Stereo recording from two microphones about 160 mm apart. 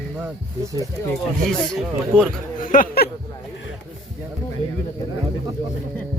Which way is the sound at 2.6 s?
55° left (ahead or behind).